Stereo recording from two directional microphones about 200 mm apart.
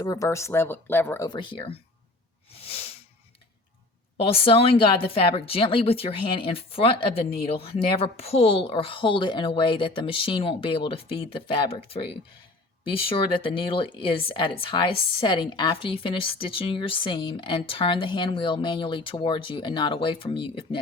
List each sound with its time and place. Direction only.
0.0 s speech: 15° left (ahead or behind)
2.5 s sneeze: 30° left (ahead or behind)
4.2 s speech: 30° left (ahead or behind)